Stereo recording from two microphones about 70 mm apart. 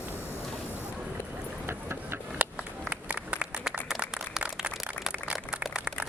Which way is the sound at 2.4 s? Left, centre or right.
Centre.